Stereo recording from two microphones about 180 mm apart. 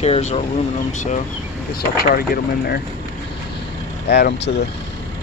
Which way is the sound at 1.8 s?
55° left (ahead or behind).